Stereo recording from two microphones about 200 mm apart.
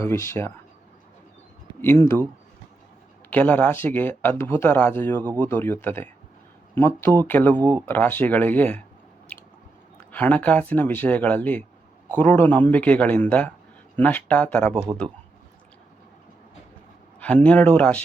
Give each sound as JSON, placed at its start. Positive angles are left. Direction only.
{"t": 0.0, "sound": "speech", "side_deg": 15}
{"t": 1.8, "sound": "speech", "side_deg": 10}
{"t": 3.2, "sound": "speech", "side_deg": 10}
{"t": 7.6, "sound": "speech", "side_deg": -20}
{"t": 7.9, "sound": "speech", "side_deg": 10}
{"t": 9.3, "sound": "biting", "side_deg": 5}
{"t": 10.0, "sound": "speech", "side_deg": 10}
{"t": 17.2, "sound": "speech", "side_deg": 5}